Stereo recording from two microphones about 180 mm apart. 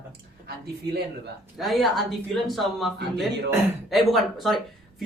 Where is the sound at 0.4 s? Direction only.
60° right (ahead or behind).